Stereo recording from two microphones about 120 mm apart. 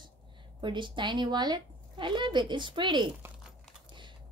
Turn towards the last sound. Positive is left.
turn(degrees=-40)  # may be behind; listen again after turning